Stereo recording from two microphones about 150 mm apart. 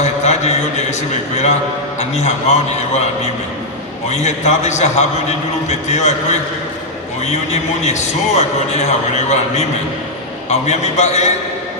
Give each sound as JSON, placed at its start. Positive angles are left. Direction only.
{"t": 0.0, "sound": "a sound", "side_deg": 50}
{"t": 2.0, "sound": "a man's voice", "side_deg": 50}
{"t": 4.1, "sound": "a man's voice", "side_deg": 50}